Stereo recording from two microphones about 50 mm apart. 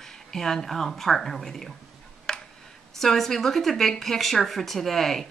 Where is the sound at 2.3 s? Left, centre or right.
Centre.